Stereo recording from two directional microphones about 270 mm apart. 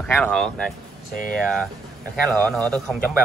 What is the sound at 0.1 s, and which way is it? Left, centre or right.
Speech, centre.